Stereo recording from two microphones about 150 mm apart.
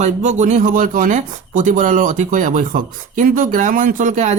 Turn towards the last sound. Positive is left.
turn(degrees=-55)  # may be behind; listen again after turning